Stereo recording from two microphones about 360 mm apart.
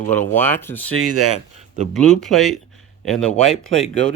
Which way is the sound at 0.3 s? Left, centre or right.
Centre.